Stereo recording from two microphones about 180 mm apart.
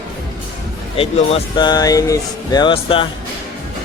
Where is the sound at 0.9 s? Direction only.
25° left (ahead or behind).